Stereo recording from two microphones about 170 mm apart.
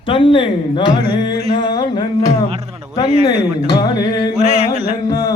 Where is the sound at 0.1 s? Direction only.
30° left (ahead or behind).